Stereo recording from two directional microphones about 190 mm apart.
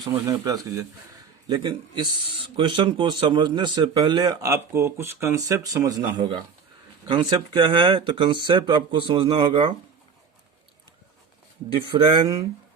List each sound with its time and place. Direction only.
0.0 s speech: 20° right (ahead or behind)
11.9 s speech: 25° right (ahead or behind)